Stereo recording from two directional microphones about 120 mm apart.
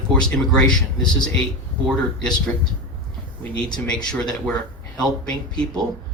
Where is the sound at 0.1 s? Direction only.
5° left (ahead or behind).